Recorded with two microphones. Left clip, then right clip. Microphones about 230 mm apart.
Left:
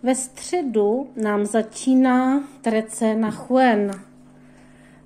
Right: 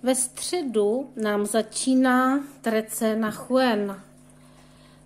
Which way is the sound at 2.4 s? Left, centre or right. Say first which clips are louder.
Left 3 dB; right.